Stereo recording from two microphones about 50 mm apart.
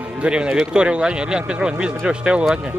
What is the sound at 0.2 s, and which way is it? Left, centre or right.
Speech, centre.